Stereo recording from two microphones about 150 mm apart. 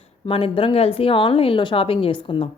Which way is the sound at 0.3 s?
35° left (ahead or behind).